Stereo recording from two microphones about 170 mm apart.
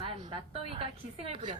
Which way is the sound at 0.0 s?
30° right (ahead or behind).